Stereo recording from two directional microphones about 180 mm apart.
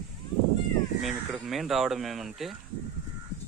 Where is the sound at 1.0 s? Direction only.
Centre (ahead or behind).